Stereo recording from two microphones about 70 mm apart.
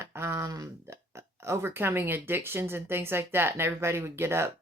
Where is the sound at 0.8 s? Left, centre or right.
Right.